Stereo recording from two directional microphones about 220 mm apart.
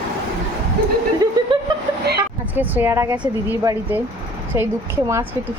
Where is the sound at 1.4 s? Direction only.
20° right (ahead or behind).